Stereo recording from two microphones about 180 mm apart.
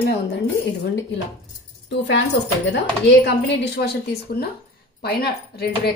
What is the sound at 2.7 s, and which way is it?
Speech, 70° left (ahead or behind).